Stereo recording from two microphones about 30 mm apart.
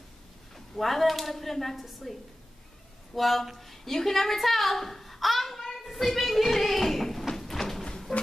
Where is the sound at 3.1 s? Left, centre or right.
Centre.